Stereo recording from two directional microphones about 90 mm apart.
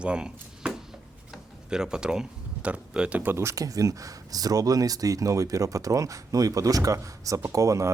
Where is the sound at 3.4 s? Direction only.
40° right (ahead or behind).